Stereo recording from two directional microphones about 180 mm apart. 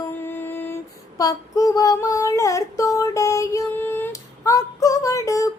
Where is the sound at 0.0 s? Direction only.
10° left (ahead or behind).